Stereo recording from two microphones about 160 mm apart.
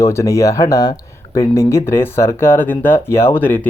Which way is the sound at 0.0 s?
20° left (ahead or behind).